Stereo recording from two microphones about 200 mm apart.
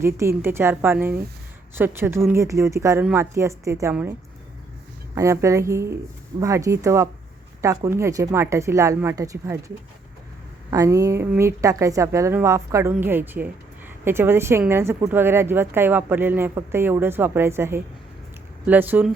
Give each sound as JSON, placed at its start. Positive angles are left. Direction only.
{"t": 0.0, "sound": "a woman's voice", "side_deg": -15}
{"t": 5.1, "sound": "a woman's voice", "side_deg": -15}